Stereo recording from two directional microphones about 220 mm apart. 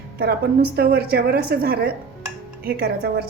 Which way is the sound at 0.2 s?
45° right (ahead or behind).